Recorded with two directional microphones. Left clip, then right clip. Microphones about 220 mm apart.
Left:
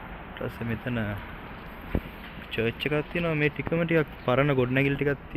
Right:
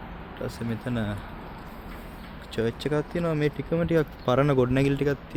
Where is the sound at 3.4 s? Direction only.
35° right (ahead or behind).